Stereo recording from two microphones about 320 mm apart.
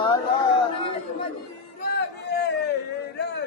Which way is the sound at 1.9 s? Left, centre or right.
Left.